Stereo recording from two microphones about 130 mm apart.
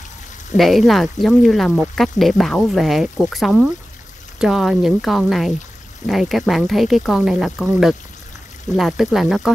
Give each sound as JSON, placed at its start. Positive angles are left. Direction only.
{"t": 0.6, "sound": "speech", "side_deg": 0}